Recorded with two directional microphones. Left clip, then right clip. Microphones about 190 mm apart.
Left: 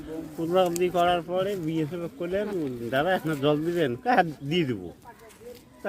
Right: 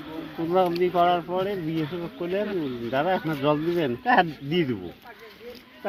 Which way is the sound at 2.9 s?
35° left (ahead or behind).